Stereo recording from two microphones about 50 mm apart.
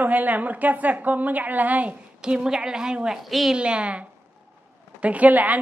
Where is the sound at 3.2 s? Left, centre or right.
Centre.